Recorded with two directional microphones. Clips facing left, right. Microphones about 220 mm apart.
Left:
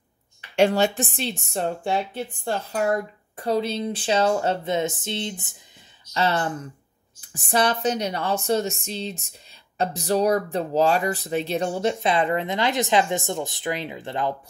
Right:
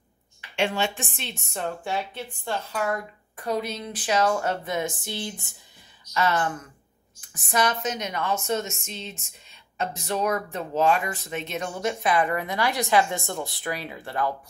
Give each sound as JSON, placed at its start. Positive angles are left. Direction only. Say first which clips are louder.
{"t": 0.6, "sound": "a woman's voice", "louder": "left 7 dB", "side_deg": 40}